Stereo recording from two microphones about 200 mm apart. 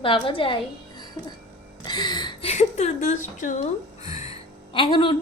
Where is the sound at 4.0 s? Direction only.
30° left (ahead or behind).